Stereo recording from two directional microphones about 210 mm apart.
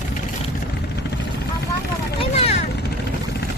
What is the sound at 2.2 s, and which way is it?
Vehicle, 30° left (ahead or behind).